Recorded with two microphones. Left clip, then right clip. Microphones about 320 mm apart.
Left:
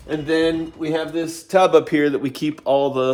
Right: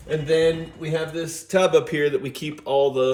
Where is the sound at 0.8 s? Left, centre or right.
Centre.